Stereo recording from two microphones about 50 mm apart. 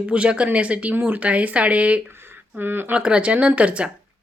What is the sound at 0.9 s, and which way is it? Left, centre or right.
Speech, right.